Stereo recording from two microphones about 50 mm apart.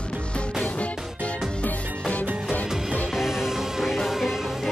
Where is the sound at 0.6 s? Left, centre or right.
Left.